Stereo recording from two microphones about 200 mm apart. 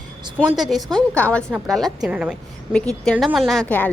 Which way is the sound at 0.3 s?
Centre (ahead or behind).